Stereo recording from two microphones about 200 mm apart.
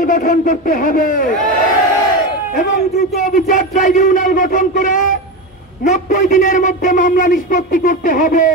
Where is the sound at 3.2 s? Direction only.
40° left (ahead or behind).